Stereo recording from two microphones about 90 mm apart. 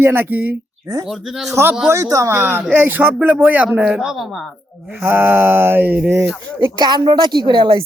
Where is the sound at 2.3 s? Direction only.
20° right (ahead or behind); by 4.5 s centre (ahead or behind).